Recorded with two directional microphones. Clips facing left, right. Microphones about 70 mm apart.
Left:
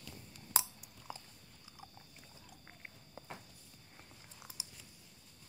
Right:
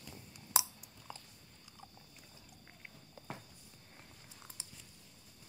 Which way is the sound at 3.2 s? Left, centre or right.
Left.